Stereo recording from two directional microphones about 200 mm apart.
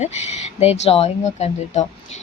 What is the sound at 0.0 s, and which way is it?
A woman's voice, 35° left (ahead or behind).